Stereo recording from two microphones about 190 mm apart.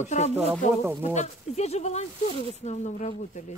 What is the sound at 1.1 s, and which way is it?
A woman's voice, 35° left (ahead or behind).